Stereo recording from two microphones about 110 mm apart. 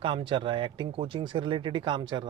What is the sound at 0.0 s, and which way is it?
Speech, 50° right (ahead or behind).